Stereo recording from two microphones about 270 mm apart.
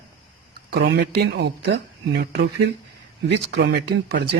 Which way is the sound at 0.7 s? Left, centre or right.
Right.